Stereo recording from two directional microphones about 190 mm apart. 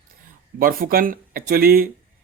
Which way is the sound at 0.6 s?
50° right (ahead or behind).